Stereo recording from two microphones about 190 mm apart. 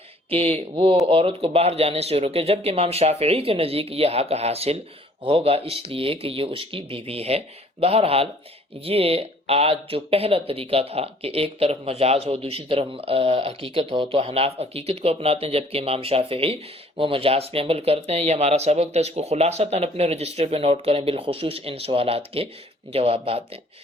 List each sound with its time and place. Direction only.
0.3 s speech: 30° right (ahead or behind)